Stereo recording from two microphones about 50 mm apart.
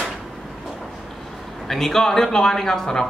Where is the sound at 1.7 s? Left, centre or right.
Centre.